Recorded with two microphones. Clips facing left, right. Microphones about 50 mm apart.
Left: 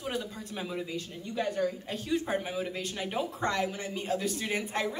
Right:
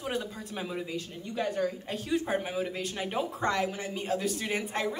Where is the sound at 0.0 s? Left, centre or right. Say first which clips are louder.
Right 1 dB; centre.